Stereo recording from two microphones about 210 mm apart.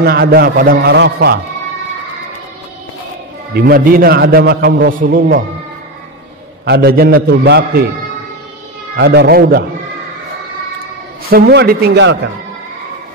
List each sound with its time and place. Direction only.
0.0 s a man's voice: 50° right (ahead or behind)
3.5 s a man's voice: 45° right (ahead or behind)
6.6 s a man's voice: 50° right (ahead or behind)
8.9 s a man's voice: 50° right (ahead or behind)
11.2 s a man's voice: 45° right (ahead or behind)